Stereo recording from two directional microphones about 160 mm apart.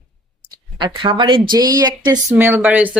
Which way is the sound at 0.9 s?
30° right (ahead or behind).